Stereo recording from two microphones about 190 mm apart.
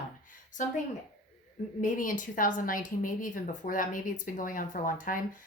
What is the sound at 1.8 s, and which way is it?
Speech, 45° left (ahead or behind).